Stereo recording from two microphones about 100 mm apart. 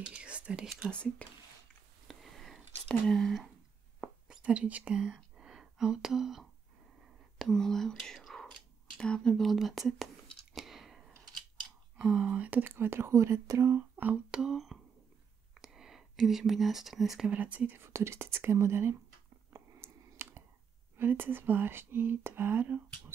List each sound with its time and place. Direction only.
0.0 s whispering: 10° right (ahead or behind)
0.9 s speech: 10° left (ahead or behind)
2.0 s whispering: centre (ahead or behind)
4.0 s whispering: 10° right (ahead or behind)
7.3 s speech: 5° left (ahead or behind)
10.5 s a sound: centre (ahead or behind)
12.0 s speech: 10° right (ahead or behind)
17.3 s speech: 15° right (ahead or behind)
17.8 s speech: 25° right (ahead or behind)
19.5 s clicking: 25° right (ahead or behind)
21.0 s speech: 20° right (ahead or behind)